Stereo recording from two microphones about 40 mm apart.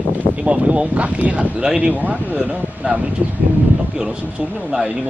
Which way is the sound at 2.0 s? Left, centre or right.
Right.